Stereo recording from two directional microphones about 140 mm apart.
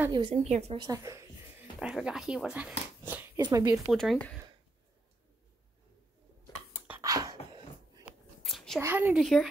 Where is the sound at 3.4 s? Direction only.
25° right (ahead or behind).